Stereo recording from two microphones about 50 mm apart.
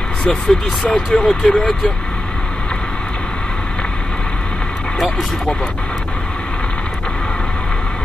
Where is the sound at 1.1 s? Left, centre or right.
Centre.